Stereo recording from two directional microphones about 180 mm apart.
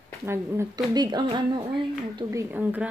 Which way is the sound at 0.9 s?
25° right (ahead or behind).